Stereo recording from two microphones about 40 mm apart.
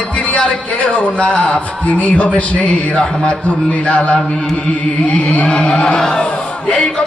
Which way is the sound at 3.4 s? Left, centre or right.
Left.